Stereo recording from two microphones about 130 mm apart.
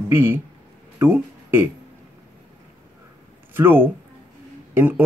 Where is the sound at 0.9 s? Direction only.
15° right (ahead or behind).